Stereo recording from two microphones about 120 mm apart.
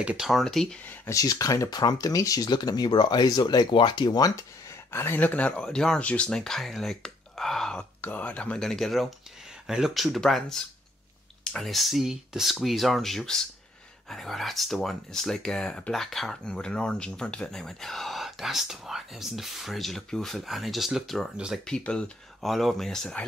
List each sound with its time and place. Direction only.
0.0 s speech: 5° right (ahead or behind)
1.1 s speech: 30° left (ahead or behind)
4.9 s speech: 20° left (ahead or behind)